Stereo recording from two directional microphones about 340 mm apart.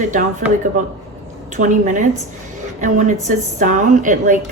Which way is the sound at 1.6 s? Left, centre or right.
Right.